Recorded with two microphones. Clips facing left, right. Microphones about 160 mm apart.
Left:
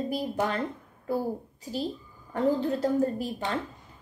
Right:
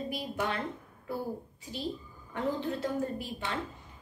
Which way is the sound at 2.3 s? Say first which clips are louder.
Left 7 dB; 40° left (ahead or behind).